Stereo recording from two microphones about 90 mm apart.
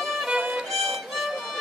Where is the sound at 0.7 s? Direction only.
Centre (ahead or behind).